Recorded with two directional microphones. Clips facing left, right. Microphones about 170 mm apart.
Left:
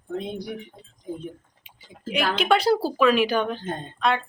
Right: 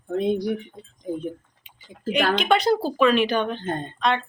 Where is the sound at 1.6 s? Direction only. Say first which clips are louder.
Right 6 dB; 5° left (ahead or behind).